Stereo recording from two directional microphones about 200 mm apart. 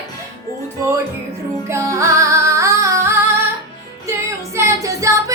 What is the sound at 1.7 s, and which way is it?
Music, 15° right (ahead or behind).